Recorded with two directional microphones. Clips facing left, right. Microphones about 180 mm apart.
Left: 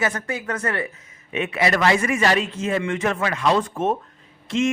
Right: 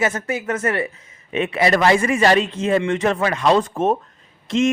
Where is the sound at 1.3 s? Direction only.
30° right (ahead or behind).